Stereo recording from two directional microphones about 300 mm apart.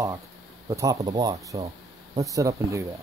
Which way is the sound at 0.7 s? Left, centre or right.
Centre.